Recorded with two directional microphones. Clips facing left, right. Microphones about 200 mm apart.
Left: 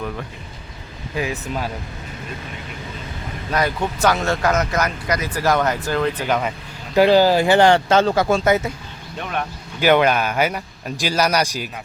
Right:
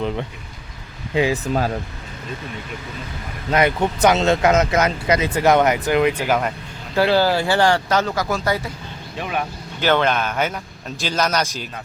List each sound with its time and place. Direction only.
1.1 s speech: 25° right (ahead or behind)
3.5 s speech: 20° right (ahead or behind); by 6.5 s 5° right (ahead or behind)
6.9 s speech: 15° left (ahead or behind)
9.1 s speech: 5° right (ahead or behind)
9.8 s a man's voice: 10° left (ahead or behind)